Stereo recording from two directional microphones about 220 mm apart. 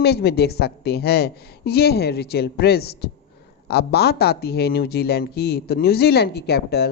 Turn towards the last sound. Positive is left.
turn(degrees=45)  # may be behind; listen again after turning